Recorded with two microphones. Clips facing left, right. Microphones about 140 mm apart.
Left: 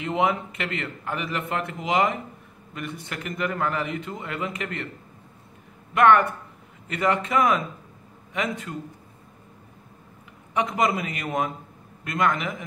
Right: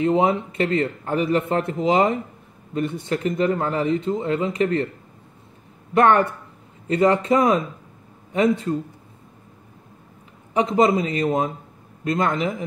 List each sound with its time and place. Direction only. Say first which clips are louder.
0.0 s speech: right 5 dB; 30° right (ahead or behind)
5.9 s a man's voice: right 1 dB; 35° right (ahead or behind)
10.5 s a man's voice: right 6 dB; 30° right (ahead or behind)